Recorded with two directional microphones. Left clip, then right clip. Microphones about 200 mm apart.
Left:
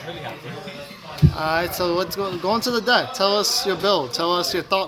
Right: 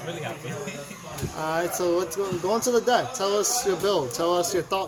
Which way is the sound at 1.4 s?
20° left (ahead or behind).